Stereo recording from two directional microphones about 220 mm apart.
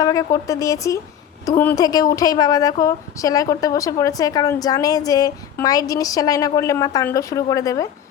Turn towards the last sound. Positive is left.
turn(degrees=15)  # may be behind; listen again after turning